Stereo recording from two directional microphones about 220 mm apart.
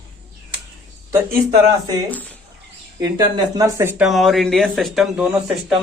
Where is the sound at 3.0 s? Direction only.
15° right (ahead or behind).